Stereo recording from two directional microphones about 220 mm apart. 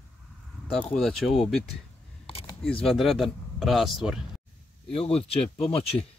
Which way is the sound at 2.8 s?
Centre (ahead or behind).